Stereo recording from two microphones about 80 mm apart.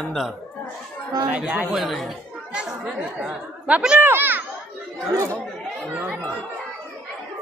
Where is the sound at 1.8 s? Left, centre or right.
Centre.